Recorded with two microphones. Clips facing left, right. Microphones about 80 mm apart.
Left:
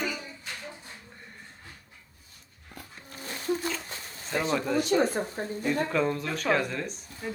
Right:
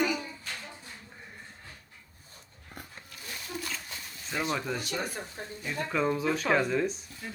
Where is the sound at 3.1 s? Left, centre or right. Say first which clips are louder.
Left 9 dB; left.